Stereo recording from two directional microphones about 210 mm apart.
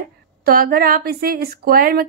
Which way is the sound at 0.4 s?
45° right (ahead or behind).